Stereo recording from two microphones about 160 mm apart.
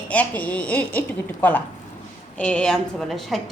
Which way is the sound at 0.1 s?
10° left (ahead or behind).